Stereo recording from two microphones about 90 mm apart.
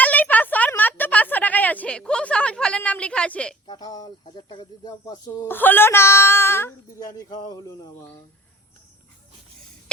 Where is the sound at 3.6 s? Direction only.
50° left (ahead or behind).